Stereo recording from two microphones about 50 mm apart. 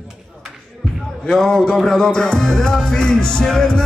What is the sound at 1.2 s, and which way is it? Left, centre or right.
Music, centre.